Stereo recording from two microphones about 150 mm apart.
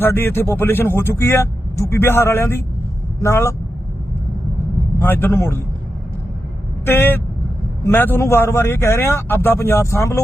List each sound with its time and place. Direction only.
0.0 s speech: 15° left (ahead or behind)
4.9 s speech: 15° left (ahead or behind)
6.8 s speech: 15° left (ahead or behind)